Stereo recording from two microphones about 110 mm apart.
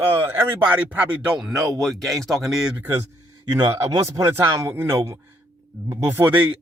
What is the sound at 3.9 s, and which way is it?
Speech, 30° right (ahead or behind).